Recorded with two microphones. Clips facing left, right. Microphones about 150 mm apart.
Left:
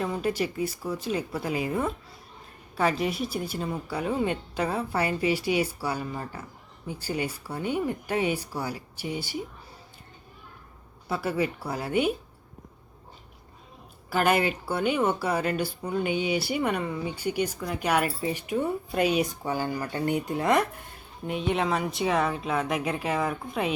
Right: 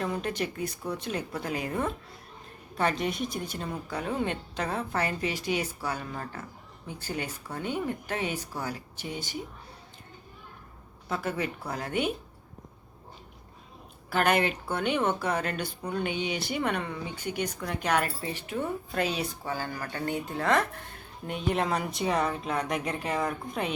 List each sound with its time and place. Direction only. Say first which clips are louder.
0.0 s a woman's voice: left 3 dB; 5° left (ahead or behind)
11.1 s a woman's voice: left 4 dB; 10° left (ahead or behind)
14.1 s a woman's voice: left 2 dB; 5° left (ahead or behind)
21.2 s speech: left 2 dB; centre (ahead or behind)